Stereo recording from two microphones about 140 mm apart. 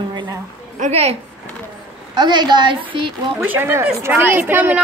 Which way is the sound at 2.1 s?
30° right (ahead or behind).